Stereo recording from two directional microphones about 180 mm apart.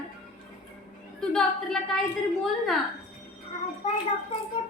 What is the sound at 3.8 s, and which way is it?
Speech, 35° left (ahead or behind).